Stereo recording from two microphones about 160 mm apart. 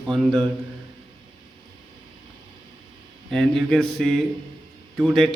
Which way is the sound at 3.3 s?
5° left (ahead or behind).